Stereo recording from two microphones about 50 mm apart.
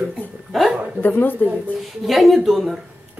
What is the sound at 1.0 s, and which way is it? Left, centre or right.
Speech, left.